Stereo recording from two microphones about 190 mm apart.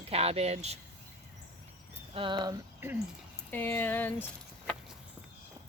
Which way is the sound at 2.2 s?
25° right (ahead or behind).